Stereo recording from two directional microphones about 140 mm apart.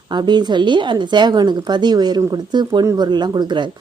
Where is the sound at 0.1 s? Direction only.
30° right (ahead or behind).